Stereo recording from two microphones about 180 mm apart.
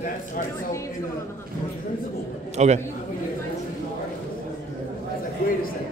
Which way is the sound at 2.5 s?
40° right (ahead or behind).